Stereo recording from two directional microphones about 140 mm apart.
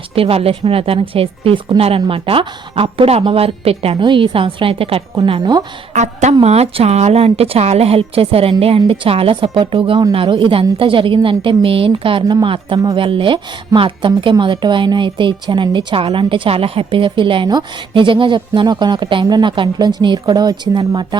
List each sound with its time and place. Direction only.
0.2 s a woman's voice: 45° right (ahead or behind)
5.9 s a woman's voice: 55° right (ahead or behind); by 21.2 s 35° right (ahead or behind)